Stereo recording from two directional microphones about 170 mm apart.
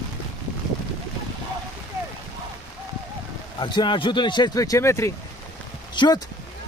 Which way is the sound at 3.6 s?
25° left (ahead or behind).